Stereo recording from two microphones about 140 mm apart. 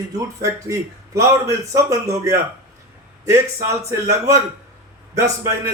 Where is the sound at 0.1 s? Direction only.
20° right (ahead or behind).